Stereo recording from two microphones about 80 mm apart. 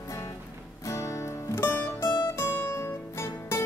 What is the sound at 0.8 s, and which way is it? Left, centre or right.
Music, left.